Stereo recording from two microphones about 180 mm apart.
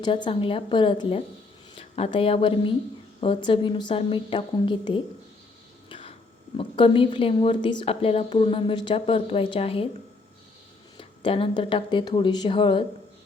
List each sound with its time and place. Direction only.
0.0 s speech: 25° left (ahead or behind)
5.9 s a sound: 30° left (ahead or behind)
6.6 s speech: 30° left (ahead or behind)
10.9 s speech: 30° left (ahead or behind)